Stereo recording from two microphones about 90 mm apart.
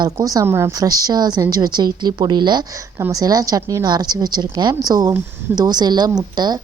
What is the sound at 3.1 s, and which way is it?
A woman's voice, 45° right (ahead or behind).